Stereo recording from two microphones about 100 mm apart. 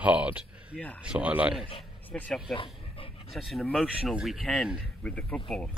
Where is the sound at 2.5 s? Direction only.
65° left (ahead or behind).